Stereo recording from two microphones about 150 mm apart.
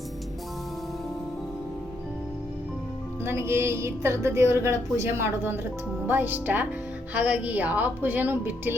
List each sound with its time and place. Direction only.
3.2 s a woman's voice: 15° right (ahead or behind)